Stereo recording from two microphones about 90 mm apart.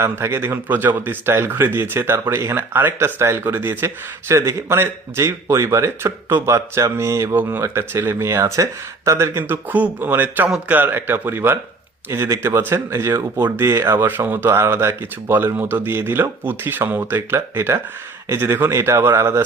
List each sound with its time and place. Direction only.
0.0 s speech: 30° right (ahead or behind)